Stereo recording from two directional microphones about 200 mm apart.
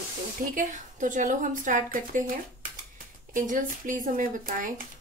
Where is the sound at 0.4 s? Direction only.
40° right (ahead or behind).